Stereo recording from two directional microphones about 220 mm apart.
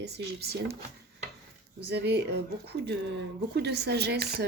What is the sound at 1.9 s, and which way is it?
Speech, 50° right (ahead or behind).